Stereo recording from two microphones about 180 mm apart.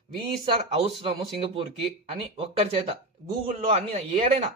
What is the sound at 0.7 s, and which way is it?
Speech, 35° right (ahead or behind).